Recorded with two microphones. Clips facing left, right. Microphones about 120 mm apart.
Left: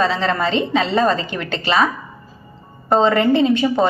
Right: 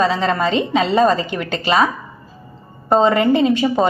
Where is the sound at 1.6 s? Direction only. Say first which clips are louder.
Right 1 dB; 20° right (ahead or behind).